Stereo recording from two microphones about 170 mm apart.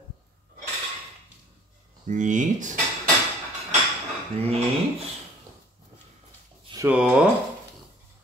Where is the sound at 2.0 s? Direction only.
45° right (ahead or behind).